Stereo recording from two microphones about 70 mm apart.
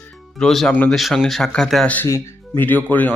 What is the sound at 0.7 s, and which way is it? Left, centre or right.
Speech, left.